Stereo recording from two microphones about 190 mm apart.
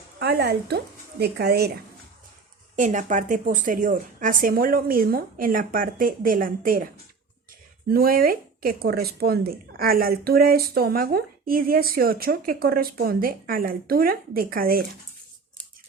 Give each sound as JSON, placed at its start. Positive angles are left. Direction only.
{"t": 0.2, "sound": "speech", "side_deg": -60}
{"t": 2.7, "sound": "speech", "side_deg": -40}
{"t": 7.9, "sound": "speech", "side_deg": -50}